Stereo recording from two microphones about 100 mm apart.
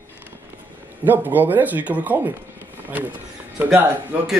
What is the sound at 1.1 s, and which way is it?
Speech, 20° right (ahead or behind).